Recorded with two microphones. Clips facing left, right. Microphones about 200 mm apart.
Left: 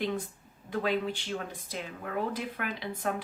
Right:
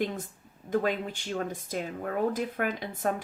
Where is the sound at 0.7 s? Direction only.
45° right (ahead or behind).